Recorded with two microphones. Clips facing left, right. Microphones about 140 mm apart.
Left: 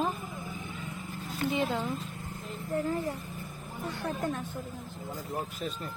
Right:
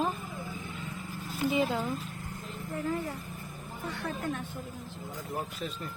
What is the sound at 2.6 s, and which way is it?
Speech, 30° left (ahead or behind).